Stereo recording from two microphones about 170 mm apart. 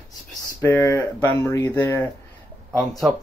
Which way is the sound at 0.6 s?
10° left (ahead or behind).